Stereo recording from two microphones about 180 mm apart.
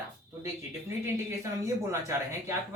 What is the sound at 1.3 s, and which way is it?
Speech, 15° right (ahead or behind).